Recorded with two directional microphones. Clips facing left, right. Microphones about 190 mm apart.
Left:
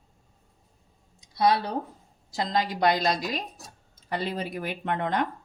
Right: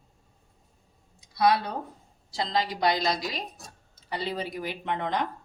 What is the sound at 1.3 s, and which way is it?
Speech, 25° left (ahead or behind).